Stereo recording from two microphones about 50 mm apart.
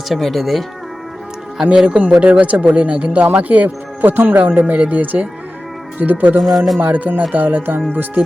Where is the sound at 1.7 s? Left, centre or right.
Right.